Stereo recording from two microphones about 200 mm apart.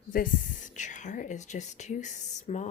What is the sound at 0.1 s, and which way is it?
Speech, 40° left (ahead or behind).